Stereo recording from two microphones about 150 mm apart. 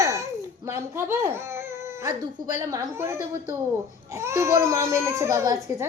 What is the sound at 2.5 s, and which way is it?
Speech, 20° right (ahead or behind).